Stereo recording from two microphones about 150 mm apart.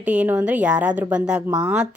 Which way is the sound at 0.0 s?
10° right (ahead or behind).